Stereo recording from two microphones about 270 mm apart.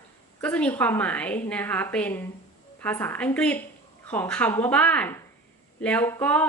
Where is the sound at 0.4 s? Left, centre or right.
Centre.